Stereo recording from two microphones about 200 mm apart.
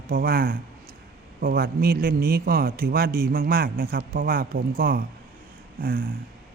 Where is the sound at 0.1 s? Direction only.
45° right (ahead or behind).